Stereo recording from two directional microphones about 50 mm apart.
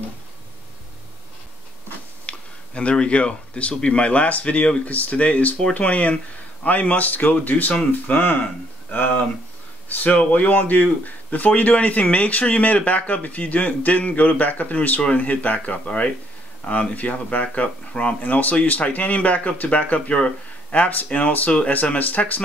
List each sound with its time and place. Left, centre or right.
2.2 s speech: left
8.9 s a sound: left
9.8 s speech: left